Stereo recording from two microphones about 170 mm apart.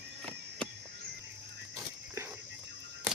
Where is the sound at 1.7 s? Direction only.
15° right (ahead or behind).